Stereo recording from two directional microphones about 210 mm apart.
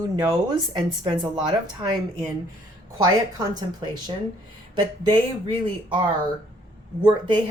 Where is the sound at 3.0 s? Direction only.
20° right (ahead or behind).